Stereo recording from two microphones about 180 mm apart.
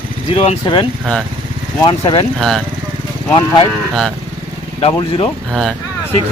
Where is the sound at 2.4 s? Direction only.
Centre (ahead or behind).